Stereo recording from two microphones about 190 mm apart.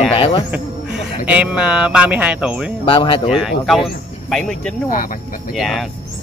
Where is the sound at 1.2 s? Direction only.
5° right (ahead or behind).